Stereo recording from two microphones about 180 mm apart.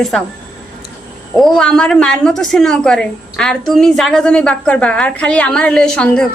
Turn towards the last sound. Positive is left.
turn(degrees=5)  # may be behind; listen again after turning